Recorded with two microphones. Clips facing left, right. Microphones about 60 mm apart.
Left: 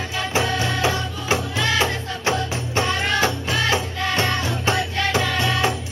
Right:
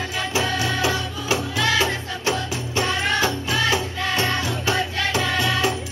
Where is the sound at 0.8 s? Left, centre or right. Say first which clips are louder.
Left 1 dB; left.